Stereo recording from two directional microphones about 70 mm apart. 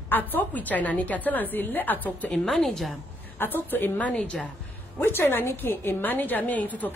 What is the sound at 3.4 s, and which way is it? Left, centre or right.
A woman's voice, left.